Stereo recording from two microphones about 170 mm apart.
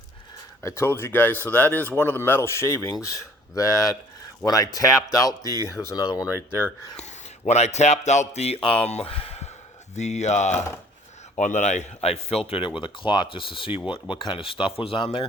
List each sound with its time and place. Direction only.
0.6 s speech: 15° left (ahead or behind)
6.9 s speech: 40° left (ahead or behind)